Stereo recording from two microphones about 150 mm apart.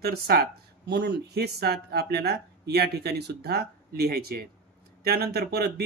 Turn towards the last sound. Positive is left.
turn(degrees=-90)